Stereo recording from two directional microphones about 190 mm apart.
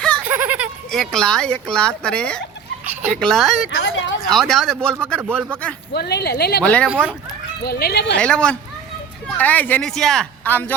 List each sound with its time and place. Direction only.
0.3 s a sound: 10° right (ahead or behind)
0.9 s speech: 5° left (ahead or behind)
3.8 s speech: 75° left (ahead or behind)
4.3 s speech: centre (ahead or behind)
5.3 s speech: 10° right (ahead or behind)
5.9 s speech: 60° left (ahead or behind)
6.6 s speech: 5° left (ahead or behind)
6.8 s speech: 5° right (ahead or behind)
7.6 s speech: 55° left (ahead or behind)
8.1 s speech: 5° left (ahead or behind)